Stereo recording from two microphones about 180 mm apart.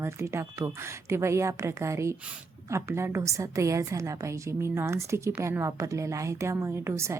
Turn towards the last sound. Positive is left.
turn(degrees=-15)  # may be behind; listen again after turning